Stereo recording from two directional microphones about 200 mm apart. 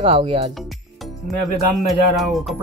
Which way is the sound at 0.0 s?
25° right (ahead or behind).